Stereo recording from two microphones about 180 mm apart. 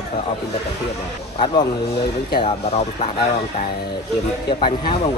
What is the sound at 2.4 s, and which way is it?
Speech, 35° left (ahead or behind).